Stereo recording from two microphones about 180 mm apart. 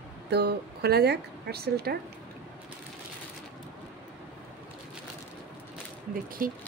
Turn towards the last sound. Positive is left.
turn(degrees=-50)  # may be behind; listen again after turning